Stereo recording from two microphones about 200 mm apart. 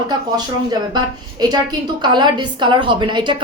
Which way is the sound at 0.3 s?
20° right (ahead or behind).